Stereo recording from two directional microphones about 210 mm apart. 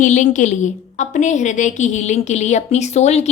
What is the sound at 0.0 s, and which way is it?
A woman's voice, 35° left (ahead or behind).